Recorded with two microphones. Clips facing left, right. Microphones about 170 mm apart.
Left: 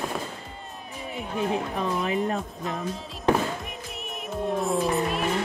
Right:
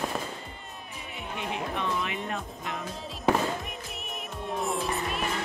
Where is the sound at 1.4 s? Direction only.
35° left (ahead or behind).